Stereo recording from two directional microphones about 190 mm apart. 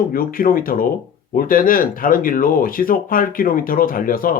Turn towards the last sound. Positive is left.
turn(degrees=50)  # may be behind; listen again after turning